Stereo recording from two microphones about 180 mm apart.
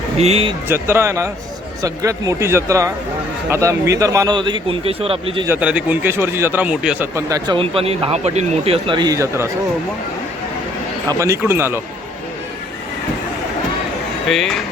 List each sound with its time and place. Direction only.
0.2 s speech: 35° right (ahead or behind)
0.7 s a man's voice: 15° right (ahead or behind); by 5.5 s 30° right (ahead or behind)
5.5 s speech: 5° right (ahead or behind)
11.1 s speech: 15° right (ahead or behind)
14.3 s speech: centre (ahead or behind)